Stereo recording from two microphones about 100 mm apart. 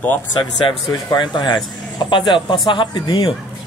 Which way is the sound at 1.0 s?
50° left (ahead or behind).